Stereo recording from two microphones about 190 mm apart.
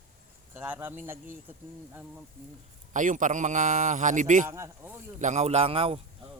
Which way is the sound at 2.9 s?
40° right (ahead or behind).